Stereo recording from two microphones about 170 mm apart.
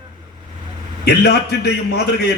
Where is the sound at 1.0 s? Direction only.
70° left (ahead or behind).